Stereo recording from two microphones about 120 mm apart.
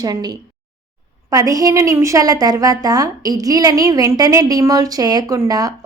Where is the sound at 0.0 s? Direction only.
35° right (ahead or behind).